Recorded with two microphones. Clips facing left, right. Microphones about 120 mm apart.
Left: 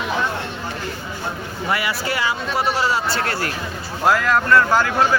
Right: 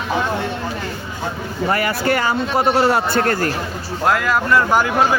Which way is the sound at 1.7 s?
45° right (ahead or behind).